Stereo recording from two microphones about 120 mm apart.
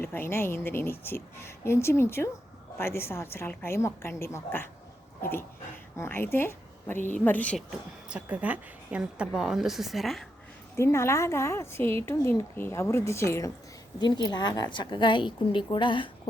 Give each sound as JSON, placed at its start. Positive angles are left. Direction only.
{"t": 0.0, "sound": "a woman's voice", "side_deg": 20}
{"t": 7.7, "sound": "a woman's voice", "side_deg": -10}
{"t": 10.8, "sound": "a woman's voice", "side_deg": 20}
{"t": 14.0, "sound": "a woman's voice", "side_deg": 35}